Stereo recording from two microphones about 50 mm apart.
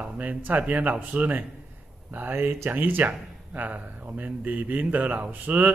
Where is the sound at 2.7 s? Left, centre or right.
Right.